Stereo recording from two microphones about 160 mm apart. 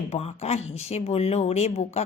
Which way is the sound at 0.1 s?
40° left (ahead or behind).